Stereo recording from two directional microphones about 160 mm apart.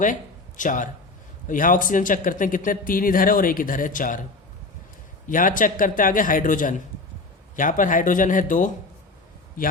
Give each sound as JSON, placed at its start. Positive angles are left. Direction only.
{"t": 0.0, "sound": "speech", "side_deg": 55}
{"t": 5.3, "sound": "speech", "side_deg": 55}